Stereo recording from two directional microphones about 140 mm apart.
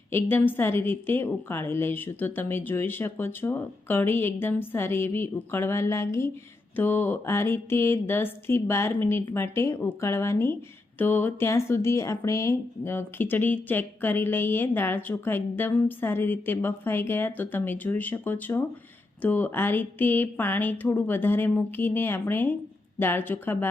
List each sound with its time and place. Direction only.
0.1 s speech: 15° left (ahead or behind)